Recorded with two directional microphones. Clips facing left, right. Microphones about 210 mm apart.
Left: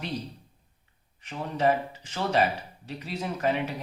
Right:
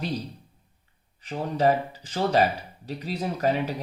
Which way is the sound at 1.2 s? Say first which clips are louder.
Right 3 dB; 35° right (ahead or behind).